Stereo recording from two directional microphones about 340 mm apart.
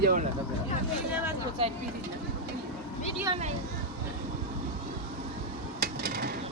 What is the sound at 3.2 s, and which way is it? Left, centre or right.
Speech, centre.